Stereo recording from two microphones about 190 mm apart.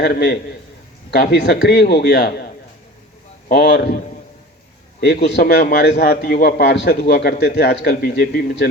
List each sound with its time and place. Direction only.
0.0 s speech: 55° left (ahead or behind)
3.5 s speech: 60° left (ahead or behind)